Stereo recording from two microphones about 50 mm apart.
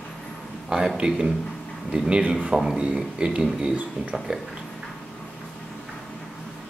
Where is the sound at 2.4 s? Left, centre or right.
Centre.